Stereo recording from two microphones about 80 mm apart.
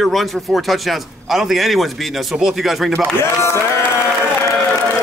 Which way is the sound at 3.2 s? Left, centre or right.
Left.